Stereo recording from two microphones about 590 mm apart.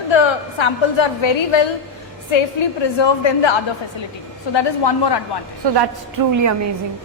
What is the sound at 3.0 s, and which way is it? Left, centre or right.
A woman's voice, left.